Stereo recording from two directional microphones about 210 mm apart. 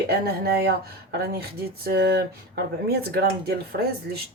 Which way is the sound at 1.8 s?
50° right (ahead or behind).